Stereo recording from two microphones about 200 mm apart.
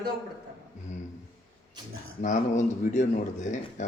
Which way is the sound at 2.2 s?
40° left (ahead or behind).